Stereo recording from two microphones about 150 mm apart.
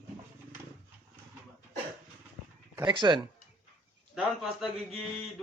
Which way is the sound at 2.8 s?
30° right (ahead or behind).